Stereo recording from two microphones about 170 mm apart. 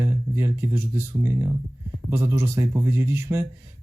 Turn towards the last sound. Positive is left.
turn(degrees=-15)  # may be behind; listen again after turning